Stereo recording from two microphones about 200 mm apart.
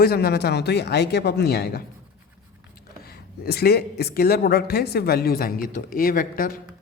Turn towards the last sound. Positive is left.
turn(degrees=45)  # may be behind; listen again after turning